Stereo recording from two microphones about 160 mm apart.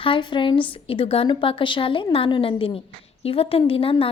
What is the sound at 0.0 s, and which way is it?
A woman's voice, 30° left (ahead or behind).